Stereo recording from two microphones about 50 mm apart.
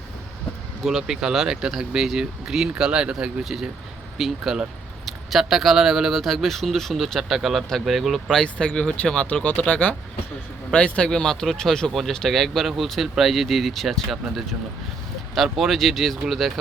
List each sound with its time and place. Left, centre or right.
0.9 s speech: centre
3.4 s speech: centre
8.5 s speech: centre
15.5 s speech: centre